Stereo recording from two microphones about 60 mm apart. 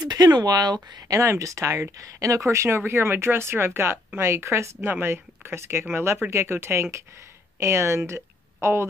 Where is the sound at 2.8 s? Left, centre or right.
Right.